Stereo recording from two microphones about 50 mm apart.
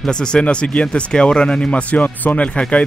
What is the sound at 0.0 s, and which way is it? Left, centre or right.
A man's voice, centre.